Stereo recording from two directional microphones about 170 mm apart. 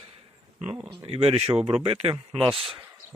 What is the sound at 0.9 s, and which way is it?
Speech, 30° right (ahead or behind).